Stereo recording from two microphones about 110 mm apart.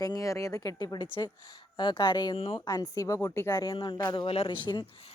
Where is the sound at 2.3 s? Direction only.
55° left (ahead or behind).